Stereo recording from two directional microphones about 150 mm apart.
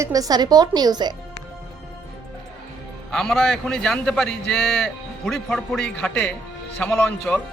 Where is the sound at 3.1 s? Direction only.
5° left (ahead or behind).